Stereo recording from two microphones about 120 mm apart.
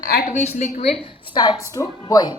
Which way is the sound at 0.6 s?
70° left (ahead or behind).